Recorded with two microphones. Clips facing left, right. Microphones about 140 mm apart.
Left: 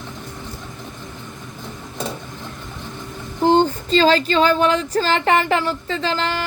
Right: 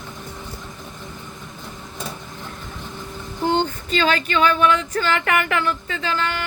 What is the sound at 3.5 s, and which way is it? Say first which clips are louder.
Speech: left 6 dB; 35° left (ahead or behind).